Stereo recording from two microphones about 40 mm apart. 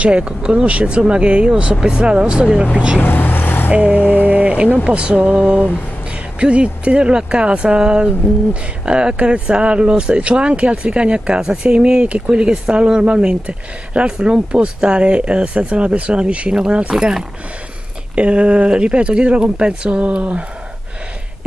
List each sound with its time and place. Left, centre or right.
0.0 s speech: right
3.0 s vehicle: left
3.7 s speech: right
18.1 s speech: right